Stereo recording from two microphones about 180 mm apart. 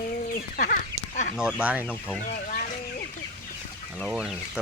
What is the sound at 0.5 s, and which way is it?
Duck, 50° left (ahead or behind).